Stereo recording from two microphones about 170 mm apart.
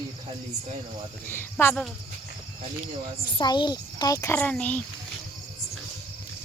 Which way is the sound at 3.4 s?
25° left (ahead or behind).